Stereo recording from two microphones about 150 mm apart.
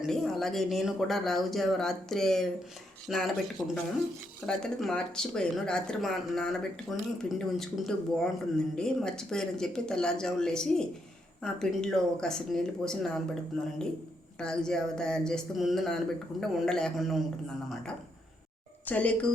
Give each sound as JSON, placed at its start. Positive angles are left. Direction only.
{"t": 0.0, "sound": "speech", "side_deg": 0}
{"t": 18.9, "sound": "speech", "side_deg": 10}